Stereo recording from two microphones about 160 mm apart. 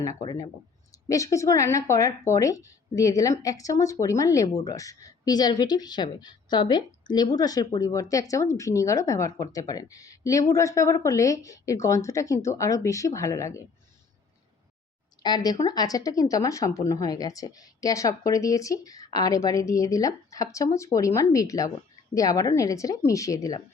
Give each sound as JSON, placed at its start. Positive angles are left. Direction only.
{"t": 0.9, "sound": "speech", "side_deg": 20}
{"t": 15.2, "sound": "speech", "side_deg": 25}